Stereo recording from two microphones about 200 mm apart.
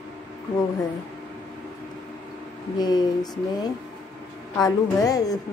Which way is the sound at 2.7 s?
20° left (ahead or behind).